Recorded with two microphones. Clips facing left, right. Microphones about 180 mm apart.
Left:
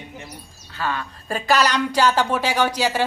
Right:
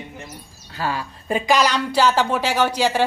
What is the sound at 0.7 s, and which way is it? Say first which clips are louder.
Speech: right 1 dB; 35° right (ahead or behind).